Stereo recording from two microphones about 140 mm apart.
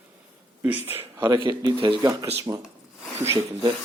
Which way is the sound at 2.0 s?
25° right (ahead or behind).